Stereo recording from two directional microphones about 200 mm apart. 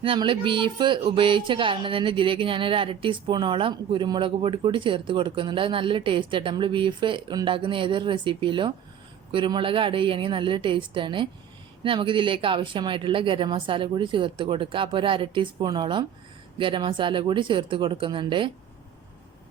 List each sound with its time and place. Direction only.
0.0 s music: 25° right (ahead or behind)